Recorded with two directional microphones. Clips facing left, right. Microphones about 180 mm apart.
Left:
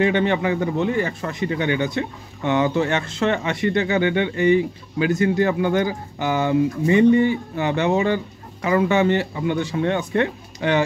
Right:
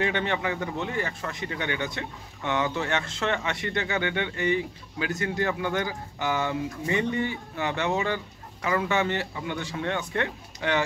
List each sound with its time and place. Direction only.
0.0 s speech: 15° left (ahead or behind)